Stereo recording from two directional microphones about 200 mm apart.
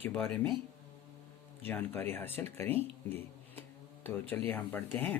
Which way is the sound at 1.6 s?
10° left (ahead or behind).